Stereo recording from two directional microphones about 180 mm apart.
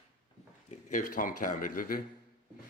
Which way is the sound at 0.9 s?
45° left (ahead or behind).